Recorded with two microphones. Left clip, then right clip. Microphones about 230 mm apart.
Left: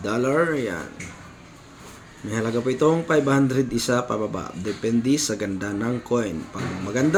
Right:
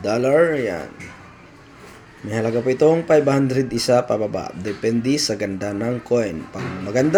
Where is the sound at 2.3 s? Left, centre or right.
Centre.